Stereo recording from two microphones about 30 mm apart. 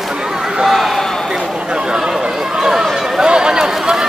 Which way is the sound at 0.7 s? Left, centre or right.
Centre.